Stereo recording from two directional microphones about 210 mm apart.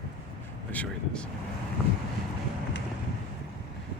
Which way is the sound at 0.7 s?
5° left (ahead or behind).